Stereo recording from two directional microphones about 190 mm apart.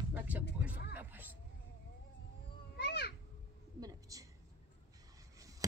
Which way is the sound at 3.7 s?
20° right (ahead or behind).